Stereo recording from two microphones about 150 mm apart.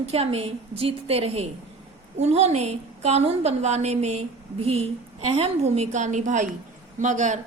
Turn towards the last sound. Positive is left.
turn(degrees=-55)  # may be behind; listen again after turning